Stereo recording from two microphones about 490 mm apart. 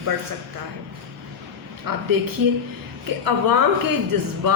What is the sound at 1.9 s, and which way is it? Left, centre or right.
Speech, right.